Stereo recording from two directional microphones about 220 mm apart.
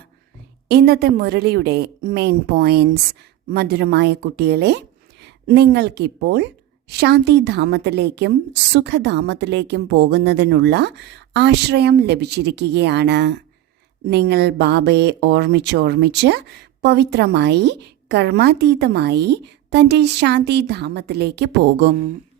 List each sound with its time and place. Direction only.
0.7 s speech: 45° right (ahead or behind)